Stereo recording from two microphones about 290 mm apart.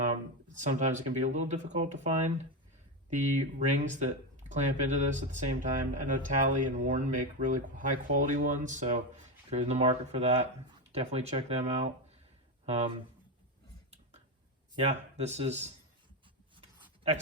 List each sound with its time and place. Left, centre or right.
0.0 s speech: right
14.8 s speech: right
16.6 s a sound: centre